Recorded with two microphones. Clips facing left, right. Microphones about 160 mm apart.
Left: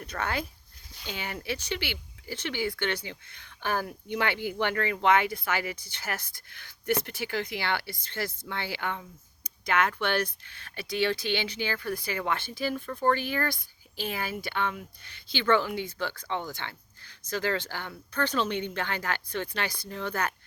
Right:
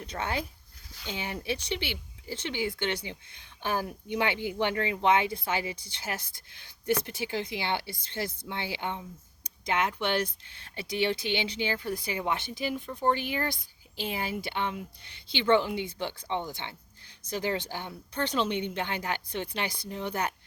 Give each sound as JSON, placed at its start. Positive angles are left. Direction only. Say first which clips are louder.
{"t": 0.0, "sound": "speech", "louder": "left 1 dB", "side_deg": -25}